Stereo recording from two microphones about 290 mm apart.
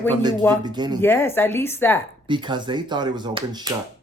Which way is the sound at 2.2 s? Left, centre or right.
Centre.